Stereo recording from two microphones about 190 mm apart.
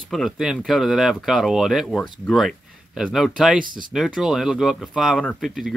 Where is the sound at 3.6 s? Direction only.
45° right (ahead or behind).